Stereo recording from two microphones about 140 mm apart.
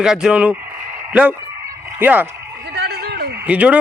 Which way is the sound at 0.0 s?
5° right (ahead or behind).